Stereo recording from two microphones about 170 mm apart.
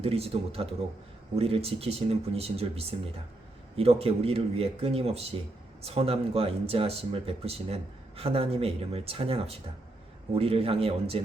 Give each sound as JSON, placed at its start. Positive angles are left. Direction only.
{"t": 0.0, "sound": "speech", "side_deg": -35}